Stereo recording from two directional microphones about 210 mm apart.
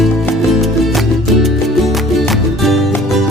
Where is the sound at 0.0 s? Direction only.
Centre (ahead or behind).